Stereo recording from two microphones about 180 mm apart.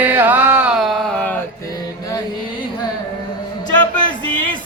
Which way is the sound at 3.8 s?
25° left (ahead or behind).